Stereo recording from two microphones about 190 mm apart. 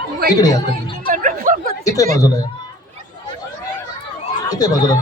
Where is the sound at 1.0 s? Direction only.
45° right (ahead or behind).